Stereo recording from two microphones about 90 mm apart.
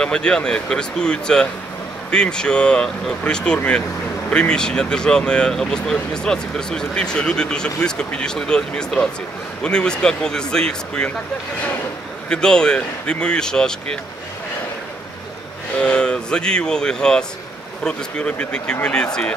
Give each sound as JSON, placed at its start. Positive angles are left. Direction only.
{"t": 0.0, "sound": "speech", "side_deg": 10}
{"t": 12.3, "sound": "speech", "side_deg": 10}
{"t": 15.8, "sound": "speech", "side_deg": 10}